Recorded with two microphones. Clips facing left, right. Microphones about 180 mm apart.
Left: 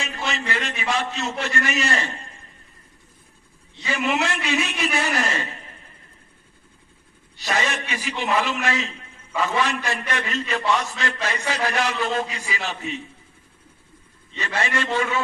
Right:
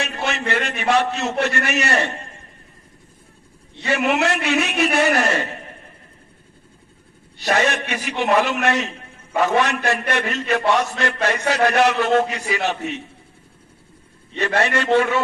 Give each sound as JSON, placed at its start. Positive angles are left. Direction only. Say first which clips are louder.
{"t": 0.0, "sound": "a man's voice", "louder": "right 4 dB", "side_deg": -65}
{"t": 3.8, "sound": "a man's voice", "louder": "right 4 dB", "side_deg": -60}
{"t": 7.3, "sound": "a man's voice", "louder": "right 6 dB", "side_deg": -60}
{"t": 14.3, "sound": "a man's voice", "louder": "right 6 dB", "side_deg": -60}